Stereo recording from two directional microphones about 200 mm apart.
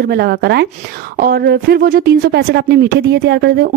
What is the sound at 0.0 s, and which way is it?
Speech, 50° right (ahead or behind).